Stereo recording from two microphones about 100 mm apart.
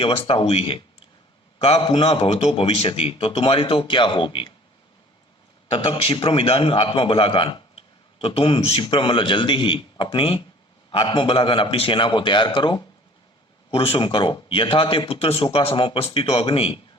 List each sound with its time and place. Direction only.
0.0 s a man's voice: 75° left (ahead or behind)
0.3 s a man's voice: 65° left (ahead or behind)
1.6 s a man's voice: 90° left; by 4.5 s 50° left (ahead or behind)
5.7 s a man's voice: 60° left (ahead or behind)
8.6 s a man's voice: 80° left; by 12.8 s 50° left (ahead or behind)
13.7 s a man's voice: 70° left (ahead or behind)